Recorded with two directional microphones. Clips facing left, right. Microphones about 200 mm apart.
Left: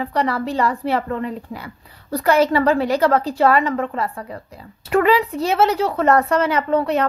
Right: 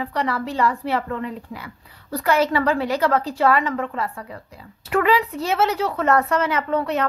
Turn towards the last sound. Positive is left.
turn(degrees=30)  # may be behind; listen again after turning